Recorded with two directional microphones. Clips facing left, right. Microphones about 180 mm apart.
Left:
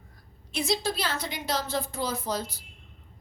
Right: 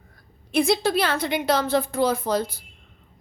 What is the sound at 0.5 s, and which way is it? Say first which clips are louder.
A woman's voice: right 8 dB; 55° right (ahead or behind).